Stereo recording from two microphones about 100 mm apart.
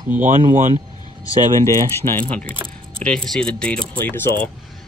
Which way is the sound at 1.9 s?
25° left (ahead or behind).